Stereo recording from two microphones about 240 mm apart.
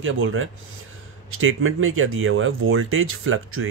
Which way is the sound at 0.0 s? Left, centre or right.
Right.